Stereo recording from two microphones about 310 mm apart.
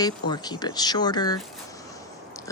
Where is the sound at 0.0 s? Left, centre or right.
Centre.